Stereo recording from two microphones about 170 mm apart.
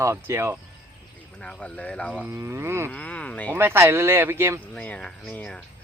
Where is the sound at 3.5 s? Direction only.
15° right (ahead or behind).